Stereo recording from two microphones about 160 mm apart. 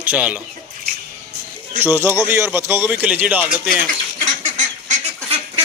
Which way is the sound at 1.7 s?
10° right (ahead or behind).